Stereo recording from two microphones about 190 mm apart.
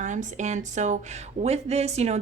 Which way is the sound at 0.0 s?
40° right (ahead or behind).